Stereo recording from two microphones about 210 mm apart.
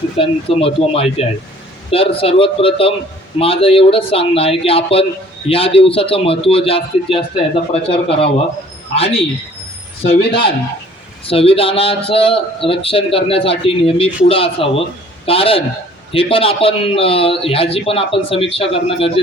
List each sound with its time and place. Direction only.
0.2 s a man's voice: 25° left (ahead or behind)